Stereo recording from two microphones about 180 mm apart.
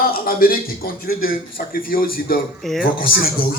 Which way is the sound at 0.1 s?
55° left (ahead or behind).